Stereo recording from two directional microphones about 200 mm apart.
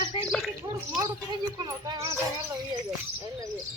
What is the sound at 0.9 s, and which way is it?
Speech, 20° right (ahead or behind).